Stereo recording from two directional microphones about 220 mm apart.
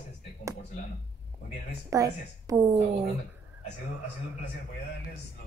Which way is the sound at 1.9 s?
15° right (ahead or behind).